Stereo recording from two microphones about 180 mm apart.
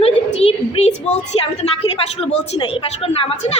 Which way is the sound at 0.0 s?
35° left (ahead or behind).